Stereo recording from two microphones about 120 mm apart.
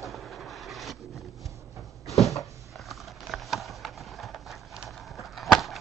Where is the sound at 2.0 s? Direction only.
Centre (ahead or behind).